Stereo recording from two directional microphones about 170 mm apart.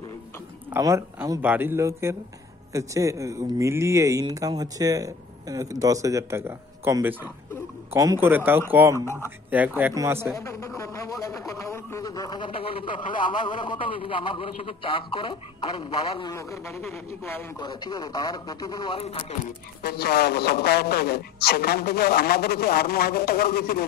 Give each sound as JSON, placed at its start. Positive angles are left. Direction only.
{"t": 0.7, "sound": "speech", "side_deg": -15}
{"t": 9.0, "sound": "a man's voice", "side_deg": 15}
{"t": 9.5, "sound": "speech", "side_deg": -10}
{"t": 10.3, "sound": "a man's voice", "side_deg": 15}
{"t": 10.8, "sound": "a sound", "side_deg": 20}
{"t": 13.4, "sound": "a man's voice", "side_deg": 25}
{"t": 16.3, "sound": "a man's voice", "side_deg": 15}
{"t": 19.8, "sound": "a man's voice", "side_deg": 65}